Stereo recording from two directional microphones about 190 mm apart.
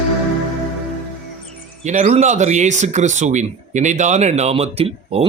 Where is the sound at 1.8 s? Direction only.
40° right (ahead or behind).